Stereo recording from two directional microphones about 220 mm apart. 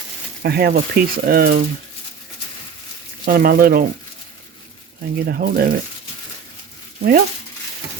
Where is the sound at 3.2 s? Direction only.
40° right (ahead or behind).